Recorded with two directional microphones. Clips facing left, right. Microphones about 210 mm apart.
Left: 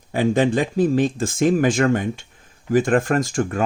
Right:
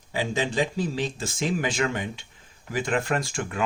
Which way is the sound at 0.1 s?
55° left (ahead or behind).